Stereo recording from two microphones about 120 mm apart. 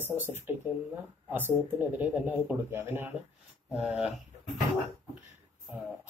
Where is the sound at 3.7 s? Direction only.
5° right (ahead or behind).